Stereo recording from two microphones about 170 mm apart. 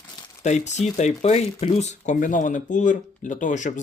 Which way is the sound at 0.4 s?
45° left (ahead or behind).